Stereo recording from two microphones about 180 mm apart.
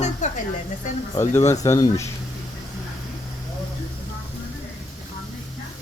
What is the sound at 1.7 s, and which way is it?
Speech, 20° left (ahead or behind).